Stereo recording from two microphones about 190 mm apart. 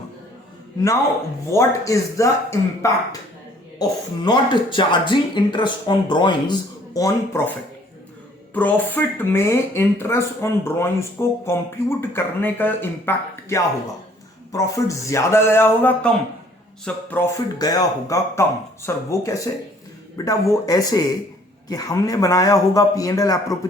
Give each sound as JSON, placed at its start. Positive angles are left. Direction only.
{"t": 1.5, "sound": "speech", "side_deg": 15}
{"t": 8.5, "sound": "speech", "side_deg": 10}